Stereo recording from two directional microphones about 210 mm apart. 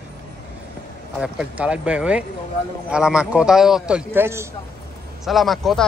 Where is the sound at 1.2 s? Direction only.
5° right (ahead or behind).